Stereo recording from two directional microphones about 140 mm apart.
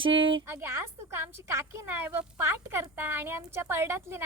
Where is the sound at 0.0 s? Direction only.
40° right (ahead or behind).